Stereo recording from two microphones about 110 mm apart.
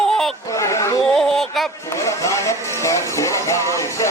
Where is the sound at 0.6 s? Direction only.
30° left (ahead or behind).